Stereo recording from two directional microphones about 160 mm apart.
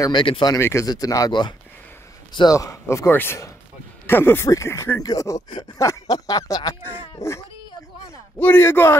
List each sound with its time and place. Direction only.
0.0 s speech: 30° left (ahead or behind)
0.6 s a man's voice: 15° left (ahead or behind)